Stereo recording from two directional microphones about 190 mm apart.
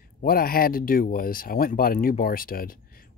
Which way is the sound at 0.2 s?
50° left (ahead or behind).